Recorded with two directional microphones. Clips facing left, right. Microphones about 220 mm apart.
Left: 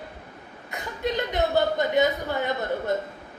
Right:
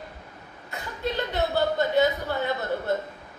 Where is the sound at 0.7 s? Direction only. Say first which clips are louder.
Left 2 dB; 15° left (ahead or behind).